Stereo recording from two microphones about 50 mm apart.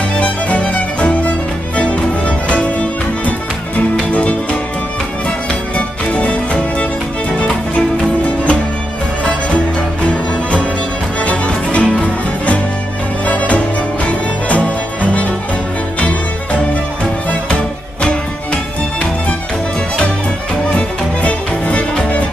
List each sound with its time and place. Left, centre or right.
0.2 s music: left
5.8 s music: left
11.2 s music: left
20.7 s music: left